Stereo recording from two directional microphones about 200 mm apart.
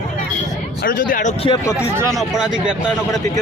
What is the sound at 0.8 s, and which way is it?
Speech, 40° left (ahead or behind).